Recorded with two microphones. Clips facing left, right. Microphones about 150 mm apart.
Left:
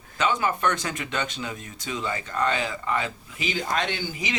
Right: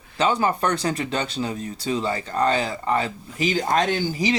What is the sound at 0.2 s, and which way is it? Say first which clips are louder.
Speech: right 3 dB; 35° right (ahead or behind).